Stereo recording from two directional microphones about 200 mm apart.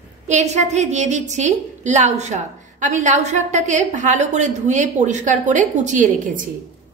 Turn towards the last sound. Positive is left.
turn(degrees=-40)  # may be behind; listen again after turning